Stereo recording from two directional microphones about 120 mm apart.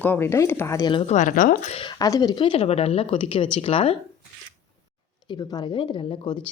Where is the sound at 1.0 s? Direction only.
80° left.